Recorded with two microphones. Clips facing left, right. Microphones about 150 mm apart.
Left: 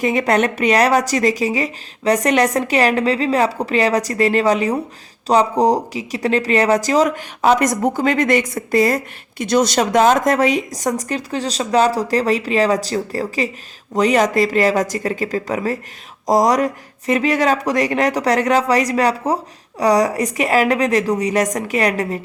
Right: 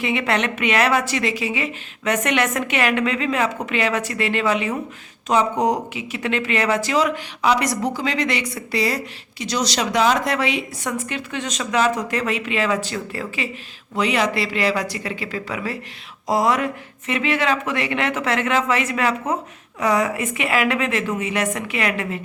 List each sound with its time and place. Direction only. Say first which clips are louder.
0.0 s speech: left 5 dB; 40° left (ahead or behind)